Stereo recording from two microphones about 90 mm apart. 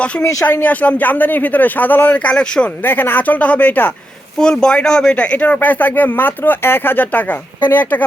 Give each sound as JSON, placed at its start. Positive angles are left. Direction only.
{"t": 0.2, "sound": "speech", "side_deg": 40}
{"t": 0.4, "sound": "speech", "side_deg": 20}
{"t": 2.8, "sound": "speech", "side_deg": 20}
{"t": 4.4, "sound": "speech", "side_deg": 10}